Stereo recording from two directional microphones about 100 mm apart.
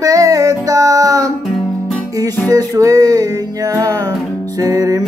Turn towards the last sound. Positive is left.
turn(degrees=-40)  # may be behind; listen again after turning